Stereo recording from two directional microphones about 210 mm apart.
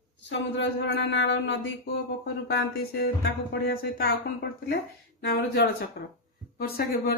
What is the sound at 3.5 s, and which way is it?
Speech, 45° left (ahead or behind).